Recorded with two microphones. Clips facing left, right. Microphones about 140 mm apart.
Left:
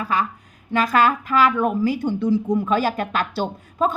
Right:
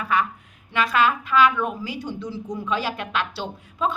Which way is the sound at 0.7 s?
45° left (ahead or behind).